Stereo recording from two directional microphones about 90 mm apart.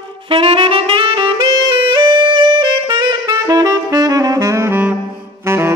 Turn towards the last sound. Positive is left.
turn(degrees=-30)  # may be behind; listen again after turning